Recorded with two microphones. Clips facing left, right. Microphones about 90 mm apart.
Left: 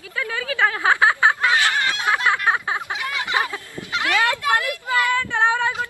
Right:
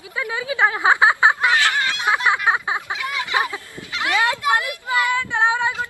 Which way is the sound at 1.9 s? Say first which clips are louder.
Right 1 dB; 20° right (ahead or behind).